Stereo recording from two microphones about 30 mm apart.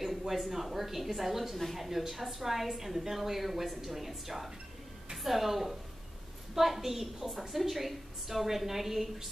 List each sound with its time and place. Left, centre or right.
0.3 s a woman's voice: centre